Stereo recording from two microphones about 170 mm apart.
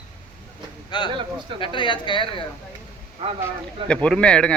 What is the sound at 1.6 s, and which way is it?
Speech, 30° left (ahead or behind).